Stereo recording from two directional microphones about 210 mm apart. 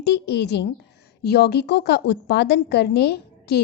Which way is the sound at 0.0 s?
55° left (ahead or behind).